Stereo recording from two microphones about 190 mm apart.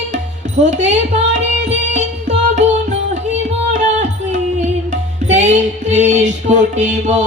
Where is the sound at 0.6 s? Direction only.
40° right (ahead or behind).